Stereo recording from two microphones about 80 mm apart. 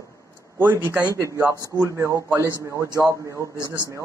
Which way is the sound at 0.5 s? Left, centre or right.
Right.